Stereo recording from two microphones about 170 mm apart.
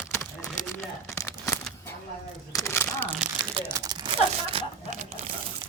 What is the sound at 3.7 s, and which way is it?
Tearing, 20° right (ahead or behind).